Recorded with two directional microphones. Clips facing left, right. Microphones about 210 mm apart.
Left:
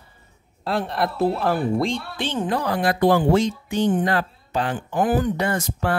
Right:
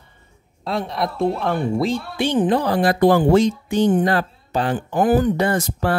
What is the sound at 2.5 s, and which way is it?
Speech, 30° right (ahead or behind).